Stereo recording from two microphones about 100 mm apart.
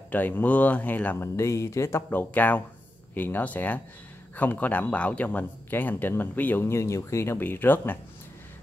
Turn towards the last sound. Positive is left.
turn(degrees=20)  # may be behind; listen again after turning